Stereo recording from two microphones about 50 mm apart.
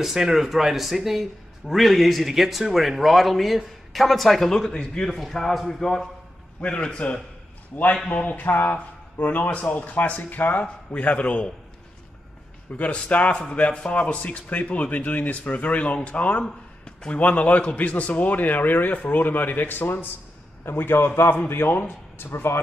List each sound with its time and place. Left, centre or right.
0.0 s a man's voice: centre
6.6 s a man's voice: left
12.7 s a man's voice: left